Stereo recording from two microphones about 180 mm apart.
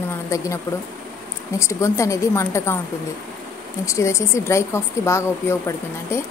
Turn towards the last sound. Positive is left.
turn(degrees=15)  # may be behind; listen again after turning